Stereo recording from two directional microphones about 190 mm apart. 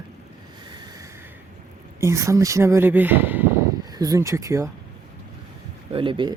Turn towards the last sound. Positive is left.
turn(degrees=-25)  # may be behind; listen again after turning